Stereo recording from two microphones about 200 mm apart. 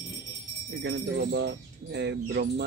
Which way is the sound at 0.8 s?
60° right (ahead or behind).